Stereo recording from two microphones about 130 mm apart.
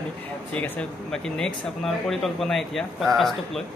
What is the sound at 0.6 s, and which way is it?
Speech, 5° left (ahead or behind).